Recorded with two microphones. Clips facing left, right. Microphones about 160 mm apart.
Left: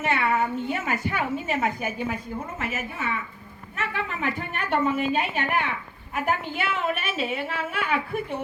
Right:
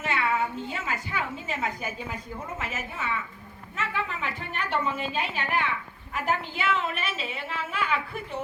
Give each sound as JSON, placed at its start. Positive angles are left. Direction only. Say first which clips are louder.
{"t": 0.0, "sound": "a woman's voice", "louder": "left 3 dB", "side_deg": 60}